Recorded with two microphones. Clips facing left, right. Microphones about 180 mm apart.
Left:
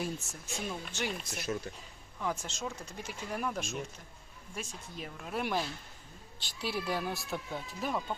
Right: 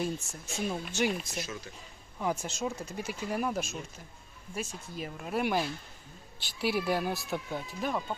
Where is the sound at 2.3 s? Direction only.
10° right (ahead or behind).